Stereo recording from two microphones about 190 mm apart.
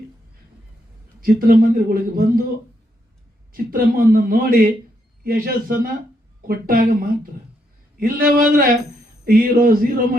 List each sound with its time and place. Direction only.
1.2 s a man's voice: 50° right (ahead or behind)
3.5 s a man's voice: 50° right (ahead or behind)